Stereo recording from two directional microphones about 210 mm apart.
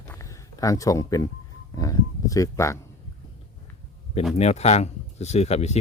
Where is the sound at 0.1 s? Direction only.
15° left (ahead or behind).